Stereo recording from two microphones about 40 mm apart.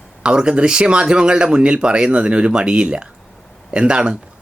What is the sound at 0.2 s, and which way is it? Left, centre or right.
Speech, right.